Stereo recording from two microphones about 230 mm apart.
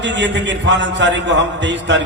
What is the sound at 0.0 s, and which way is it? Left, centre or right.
A man's voice, right.